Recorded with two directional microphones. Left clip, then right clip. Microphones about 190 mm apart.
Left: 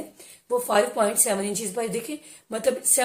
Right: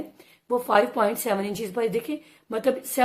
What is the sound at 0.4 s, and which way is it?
A woman's voice, 50° right (ahead or behind).